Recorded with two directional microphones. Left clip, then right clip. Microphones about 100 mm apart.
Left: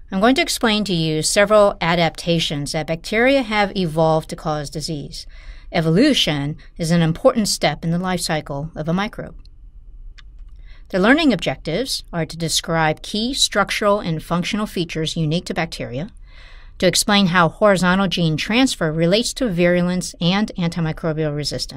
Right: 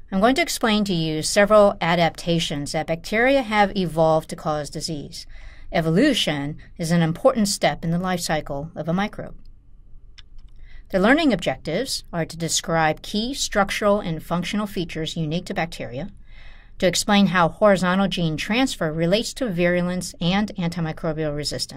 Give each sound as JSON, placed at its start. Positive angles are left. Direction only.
{"t": 0.1, "sound": "speech", "side_deg": 20}
{"t": 10.9, "sound": "speech", "side_deg": 20}